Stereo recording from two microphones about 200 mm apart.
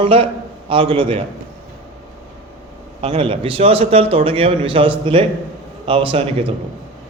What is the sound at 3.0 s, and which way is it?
A man's voice, 30° right (ahead or behind).